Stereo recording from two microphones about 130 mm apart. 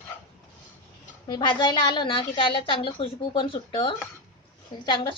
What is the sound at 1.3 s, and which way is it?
A woman's voice, 35° left (ahead or behind).